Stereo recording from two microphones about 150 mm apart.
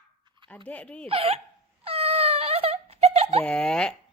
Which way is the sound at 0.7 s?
10° left (ahead or behind).